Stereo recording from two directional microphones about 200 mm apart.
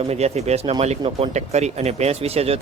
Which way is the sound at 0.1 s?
30° right (ahead or behind).